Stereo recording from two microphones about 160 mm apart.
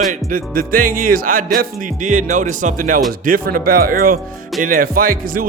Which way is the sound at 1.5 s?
55° right (ahead or behind).